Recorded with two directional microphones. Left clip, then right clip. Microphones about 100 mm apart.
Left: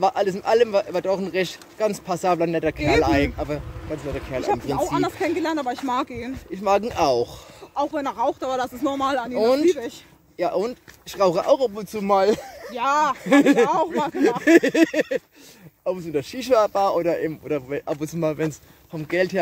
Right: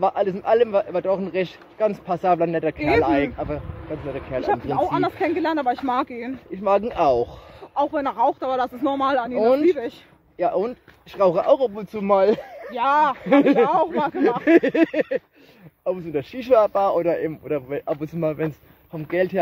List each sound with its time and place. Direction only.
0.0 s speech: 45° left (ahead or behind)
4.7 s speech: 40° right (ahead or behind)
5.4 s speech: 55° right (ahead or behind)
5.9 s speech: 45° right (ahead or behind)
6.5 s speech: 35° left (ahead or behind)
7.7 s speech: 55° right (ahead or behind)
9.3 s speech: 35° left (ahead or behind)
11.5 s speech: 20° left (ahead or behind)
12.7 s speech: 40° right (ahead or behind)
13.2 s speech: 40° left (ahead or behind)
13.9 s speech: 35° right (ahead or behind)
14.4 s speech: 35° left (ahead or behind)
17.5 s speech: 45° left (ahead or behind)